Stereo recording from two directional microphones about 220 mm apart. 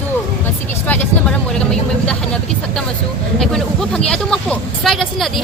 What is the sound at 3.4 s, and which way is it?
A woman's voice, centre (ahead or behind).